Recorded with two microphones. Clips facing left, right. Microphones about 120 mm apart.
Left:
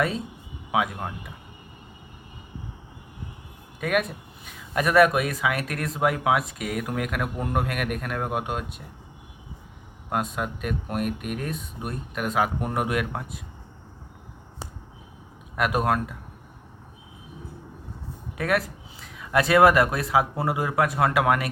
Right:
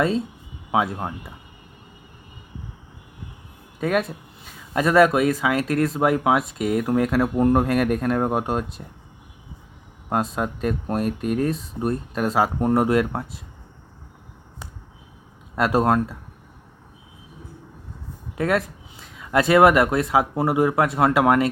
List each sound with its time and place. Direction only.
0.7 s speech: 25° right (ahead or behind)
3.8 s speech: 25° right (ahead or behind)
10.1 s speech: 30° right (ahead or behind)
15.5 s speech: 30° right (ahead or behind)
18.3 s speech: 25° right (ahead or behind)